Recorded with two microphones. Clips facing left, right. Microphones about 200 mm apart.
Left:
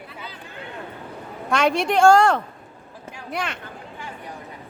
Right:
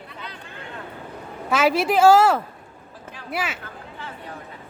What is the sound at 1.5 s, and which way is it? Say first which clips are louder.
Speech: right 1 dB; 5° right (ahead or behind).